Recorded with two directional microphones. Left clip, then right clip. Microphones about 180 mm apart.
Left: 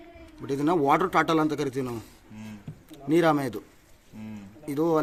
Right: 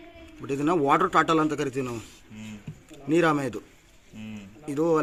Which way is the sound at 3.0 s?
Centre (ahead or behind).